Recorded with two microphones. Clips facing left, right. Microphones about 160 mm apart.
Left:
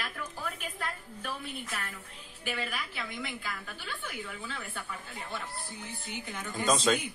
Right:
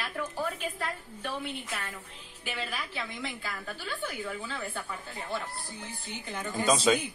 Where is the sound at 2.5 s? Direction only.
25° right (ahead or behind).